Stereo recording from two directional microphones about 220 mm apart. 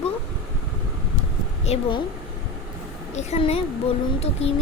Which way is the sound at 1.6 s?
25° left (ahead or behind).